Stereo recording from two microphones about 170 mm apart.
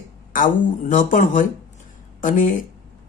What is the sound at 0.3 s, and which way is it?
Speech, 50° left (ahead or behind).